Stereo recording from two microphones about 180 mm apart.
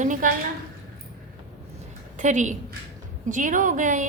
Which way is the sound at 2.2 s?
45° right (ahead or behind).